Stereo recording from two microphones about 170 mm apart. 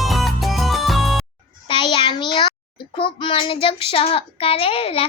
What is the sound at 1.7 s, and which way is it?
Child singing, 30° left (ahead or behind).